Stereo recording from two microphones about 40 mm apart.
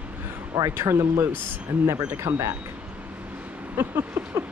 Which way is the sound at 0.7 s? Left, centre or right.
Right.